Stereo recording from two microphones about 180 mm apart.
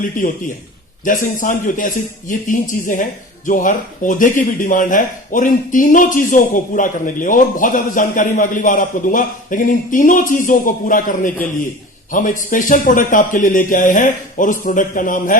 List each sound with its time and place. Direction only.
0.2 s a man's voice: 45° left (ahead or behind)